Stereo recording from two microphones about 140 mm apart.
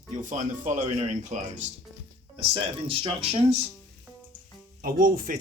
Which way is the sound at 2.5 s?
40° right (ahead or behind).